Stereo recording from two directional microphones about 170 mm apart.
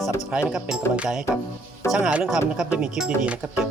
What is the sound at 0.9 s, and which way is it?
Speech, 5° right (ahead or behind).